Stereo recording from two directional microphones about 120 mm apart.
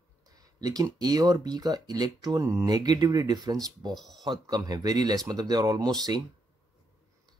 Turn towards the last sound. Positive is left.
turn(degrees=-35)  # may be behind; listen again after turning